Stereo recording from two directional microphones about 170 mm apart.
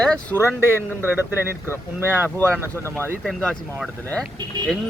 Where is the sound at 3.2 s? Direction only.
5° left (ahead or behind).